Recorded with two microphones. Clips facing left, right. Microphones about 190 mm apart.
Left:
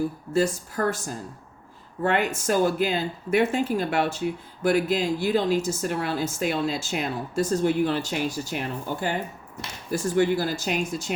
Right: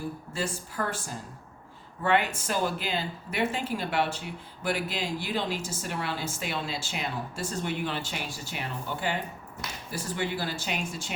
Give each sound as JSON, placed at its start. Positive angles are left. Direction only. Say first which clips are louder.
{"t": 0.3, "sound": "speech", "louder": "left 10 dB", "side_deg": 40}